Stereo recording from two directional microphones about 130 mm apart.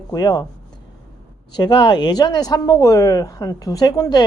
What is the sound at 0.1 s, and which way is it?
Speech, 30° left (ahead or behind).